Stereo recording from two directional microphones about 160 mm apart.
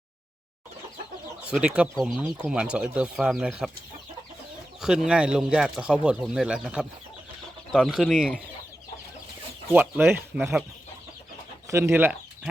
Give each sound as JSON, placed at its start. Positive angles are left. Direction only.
{"t": 1.5, "sound": "speech", "side_deg": -5}
{"t": 4.8, "sound": "speech", "side_deg": -5}
{"t": 9.7, "sound": "speech", "side_deg": -10}
{"t": 11.7, "sound": "speech", "side_deg": -15}